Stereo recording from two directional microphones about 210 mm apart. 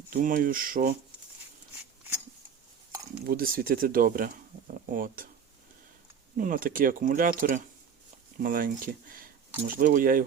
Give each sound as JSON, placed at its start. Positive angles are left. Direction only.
{"t": 0.1, "sound": "speech", "side_deg": -40}
{"t": 3.2, "sound": "speech", "side_deg": -45}
{"t": 6.3, "sound": "speech", "side_deg": -40}